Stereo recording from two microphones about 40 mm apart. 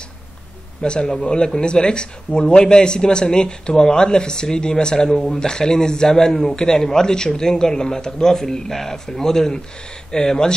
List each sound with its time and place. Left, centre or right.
0.8 s a man's voice: left